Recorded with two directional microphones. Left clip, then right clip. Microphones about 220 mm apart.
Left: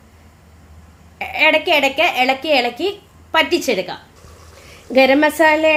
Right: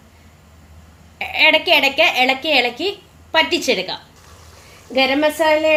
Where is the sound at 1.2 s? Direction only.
15° left (ahead or behind).